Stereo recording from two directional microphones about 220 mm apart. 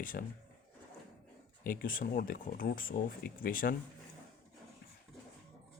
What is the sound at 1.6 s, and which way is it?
Speech, 40° left (ahead or behind).